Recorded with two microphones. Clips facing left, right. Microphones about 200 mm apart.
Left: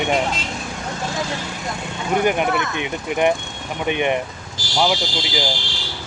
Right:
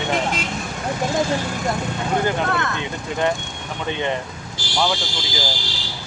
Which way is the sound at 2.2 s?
15° left (ahead or behind).